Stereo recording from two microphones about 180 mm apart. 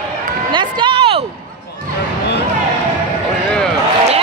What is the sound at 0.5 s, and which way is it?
Run, 25° right (ahead or behind).